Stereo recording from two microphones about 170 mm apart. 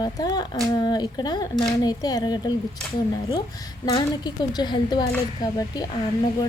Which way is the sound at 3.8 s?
25° left (ahead or behind).